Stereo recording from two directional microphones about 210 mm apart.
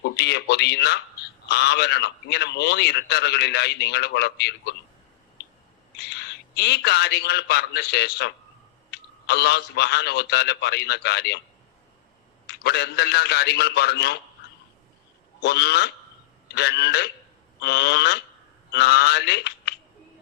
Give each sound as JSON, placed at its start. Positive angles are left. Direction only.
{"t": 0.0, "sound": "a man's voice", "side_deg": 50}
{"t": 6.0, "sound": "a man's voice", "side_deg": 55}
{"t": 12.5, "sound": "a man's voice", "side_deg": 50}
{"t": 15.4, "sound": "a man's voice", "side_deg": 50}